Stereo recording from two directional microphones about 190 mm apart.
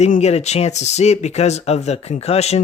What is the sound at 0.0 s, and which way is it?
Speech, 35° left (ahead or behind).